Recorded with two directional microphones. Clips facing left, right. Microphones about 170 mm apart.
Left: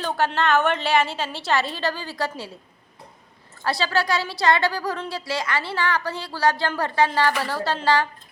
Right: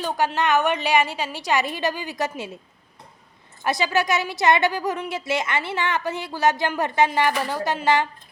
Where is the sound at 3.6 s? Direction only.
20° right (ahead or behind).